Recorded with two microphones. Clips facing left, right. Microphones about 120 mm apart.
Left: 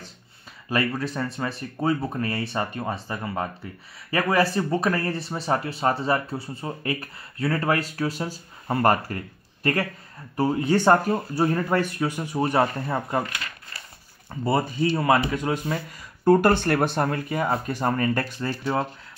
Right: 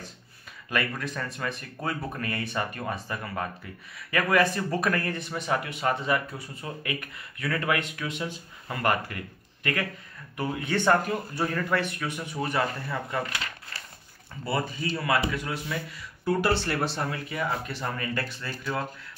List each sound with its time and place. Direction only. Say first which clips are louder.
0.7 s speech: left 5 dB; 35° left (ahead or behind)
14.3 s speech: left 6 dB; 40° left (ahead or behind)